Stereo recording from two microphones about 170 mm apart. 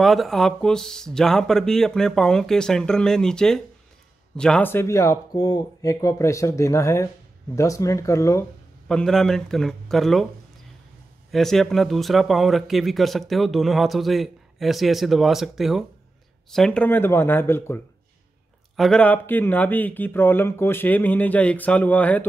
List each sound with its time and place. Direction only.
0.0 s speech: centre (ahead or behind); by 8.5 s 15° left (ahead or behind)
8.8 s speech: 5° left (ahead or behind)
11.3 s speech: centre (ahead or behind)